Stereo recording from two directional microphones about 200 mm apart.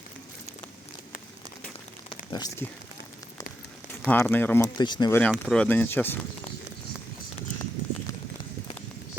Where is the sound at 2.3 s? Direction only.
20° left (ahead or behind).